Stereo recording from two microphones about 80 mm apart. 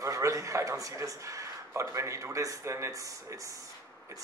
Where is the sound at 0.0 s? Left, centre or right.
Right.